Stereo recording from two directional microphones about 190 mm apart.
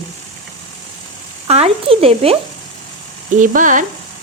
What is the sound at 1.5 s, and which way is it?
Speech, 35° right (ahead or behind).